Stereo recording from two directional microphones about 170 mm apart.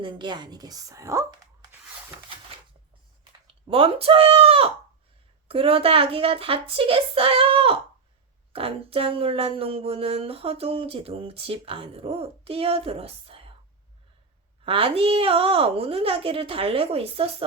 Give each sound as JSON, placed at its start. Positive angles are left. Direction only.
{"t": 0.0, "sound": "a woman's voice", "side_deg": -25}
{"t": 3.4, "sound": "speech", "side_deg": -30}
{"t": 14.6, "sound": "speech", "side_deg": -35}